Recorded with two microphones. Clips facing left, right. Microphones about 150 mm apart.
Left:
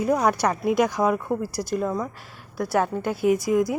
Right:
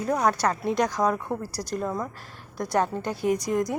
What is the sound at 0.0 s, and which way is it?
A woman's voice, 10° left (ahead or behind).